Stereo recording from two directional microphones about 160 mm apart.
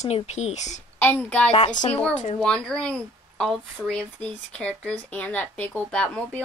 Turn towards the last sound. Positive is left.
turn(degrees=10)  # may be behind; listen again after turning